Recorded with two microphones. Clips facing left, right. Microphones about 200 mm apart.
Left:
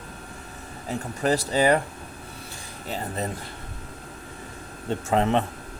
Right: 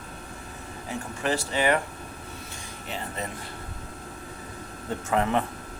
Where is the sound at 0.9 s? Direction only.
35° left (ahead or behind).